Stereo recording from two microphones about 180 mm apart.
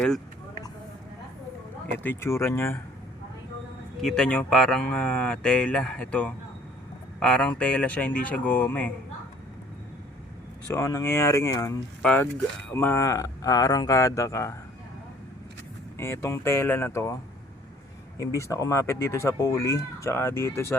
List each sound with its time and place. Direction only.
2.0 s speech: 15° left (ahead or behind)
4.0 s speech: 5° left (ahead or behind)
10.7 s speech: 15° left (ahead or behind)
16.0 s speech: 15° left (ahead or behind)
18.2 s speech: 15° left (ahead or behind)